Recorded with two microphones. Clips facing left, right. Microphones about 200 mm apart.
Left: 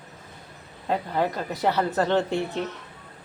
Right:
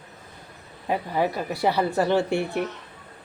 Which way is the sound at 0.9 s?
10° right (ahead or behind).